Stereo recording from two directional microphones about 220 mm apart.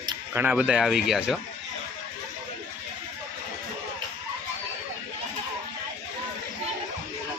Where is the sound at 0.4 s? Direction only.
5° right (ahead or behind).